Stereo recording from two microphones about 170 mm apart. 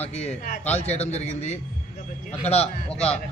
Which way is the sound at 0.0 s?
40° left (ahead or behind).